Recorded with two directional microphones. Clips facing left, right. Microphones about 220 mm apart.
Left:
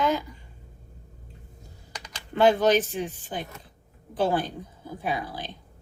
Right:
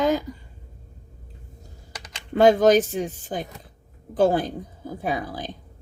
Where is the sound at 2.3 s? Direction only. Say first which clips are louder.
Right 4 dB; 45° right (ahead or behind).